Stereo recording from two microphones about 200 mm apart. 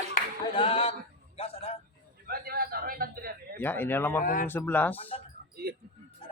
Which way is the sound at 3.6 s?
10° left (ahead or behind).